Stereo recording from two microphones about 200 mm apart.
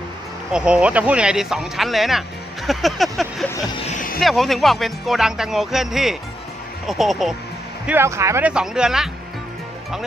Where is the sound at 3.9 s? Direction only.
40° left (ahead or behind).